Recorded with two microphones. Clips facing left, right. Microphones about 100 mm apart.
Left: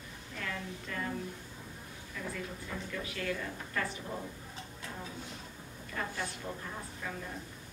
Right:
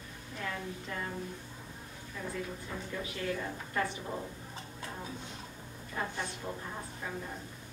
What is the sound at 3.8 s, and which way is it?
Speech, 25° right (ahead or behind).